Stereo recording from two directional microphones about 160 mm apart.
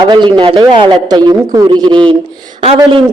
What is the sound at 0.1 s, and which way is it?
A man's voice, 30° right (ahead or behind).